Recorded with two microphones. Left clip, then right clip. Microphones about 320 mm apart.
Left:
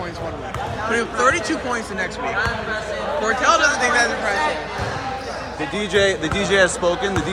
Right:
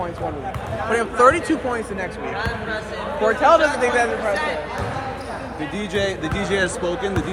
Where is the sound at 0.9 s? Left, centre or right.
Centre.